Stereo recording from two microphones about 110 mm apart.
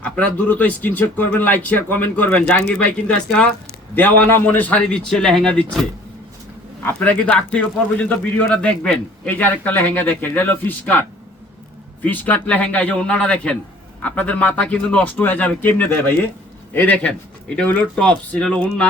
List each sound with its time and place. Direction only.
0.0 s a man's voice: 15° left (ahead or behind)
6.8 s a man's voice: 15° left (ahead or behind)
12.0 s a man's voice: 15° left (ahead or behind)